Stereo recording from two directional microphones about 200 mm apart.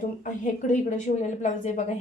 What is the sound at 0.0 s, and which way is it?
A woman's voice, 40° left (ahead or behind).